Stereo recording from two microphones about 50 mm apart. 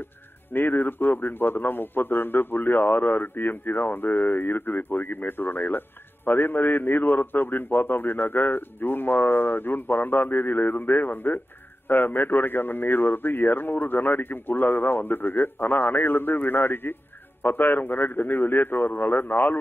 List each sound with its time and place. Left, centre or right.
0.5 s a man's voice: left